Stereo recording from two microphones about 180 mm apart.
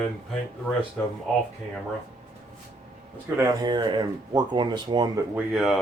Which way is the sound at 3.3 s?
20° right (ahead or behind).